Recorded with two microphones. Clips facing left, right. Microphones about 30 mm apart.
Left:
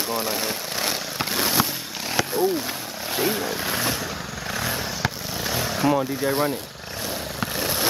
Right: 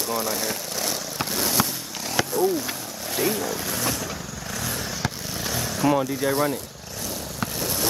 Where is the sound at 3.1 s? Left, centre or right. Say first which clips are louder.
Left 1 dB; left.